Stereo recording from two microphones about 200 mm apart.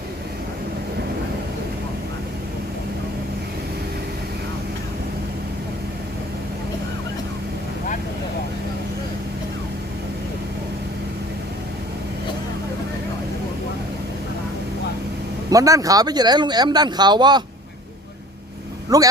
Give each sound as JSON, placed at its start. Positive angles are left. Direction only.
{"t": 15.4, "sound": "speech", "side_deg": -15}
{"t": 18.9, "sound": "speech", "side_deg": -20}